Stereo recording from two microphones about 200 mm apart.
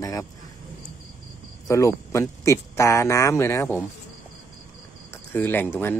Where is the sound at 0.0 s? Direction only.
15° left (ahead or behind).